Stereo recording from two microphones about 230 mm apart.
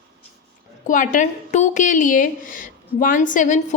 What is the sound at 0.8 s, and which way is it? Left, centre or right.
A woman's voice, left.